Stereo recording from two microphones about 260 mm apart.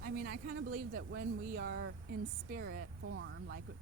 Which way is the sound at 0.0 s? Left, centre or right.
Right.